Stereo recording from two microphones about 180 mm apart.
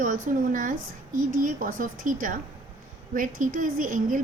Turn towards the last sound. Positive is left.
turn(degrees=-45)  # may be behind; listen again after turning